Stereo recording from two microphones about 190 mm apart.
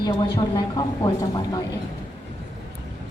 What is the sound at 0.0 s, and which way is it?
A woman's voice, 20° left (ahead or behind).